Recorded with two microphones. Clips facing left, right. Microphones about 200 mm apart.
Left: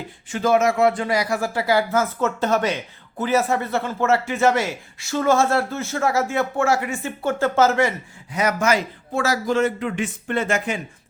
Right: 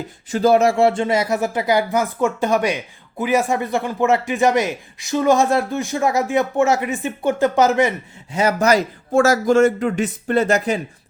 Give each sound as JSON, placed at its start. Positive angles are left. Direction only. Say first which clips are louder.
{"t": 0.3, "sound": "speech", "louder": "right 4 dB", "side_deg": -35}